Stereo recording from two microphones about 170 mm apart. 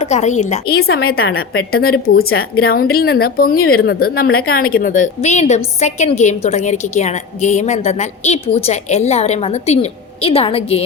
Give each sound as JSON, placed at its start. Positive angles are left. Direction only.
{"t": 0.0, "sound": "a woman's voice", "side_deg": 40}
{"t": 0.7, "sound": "a woman's voice", "side_deg": 65}